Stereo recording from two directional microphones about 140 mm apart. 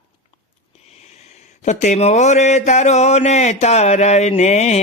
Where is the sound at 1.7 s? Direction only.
55° left (ahead or behind).